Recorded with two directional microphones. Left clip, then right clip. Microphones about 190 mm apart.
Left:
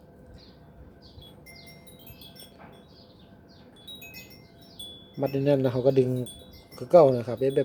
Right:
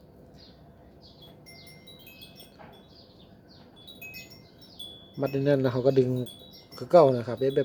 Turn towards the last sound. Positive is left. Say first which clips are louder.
# left 1 dB
turn(degrees=0)  # may be behind; listen again after turning